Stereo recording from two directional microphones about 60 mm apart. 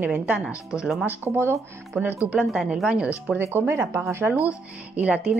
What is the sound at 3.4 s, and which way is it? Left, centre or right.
Speech, right.